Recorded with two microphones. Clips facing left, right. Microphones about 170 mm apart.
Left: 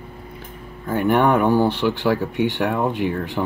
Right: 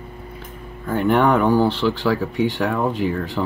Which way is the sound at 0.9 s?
15° left (ahead or behind).